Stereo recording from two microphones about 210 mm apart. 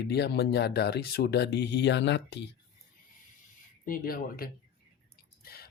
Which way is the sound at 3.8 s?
45° left (ahead or behind).